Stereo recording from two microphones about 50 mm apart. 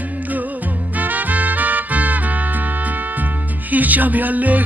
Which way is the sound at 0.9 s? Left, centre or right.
Right.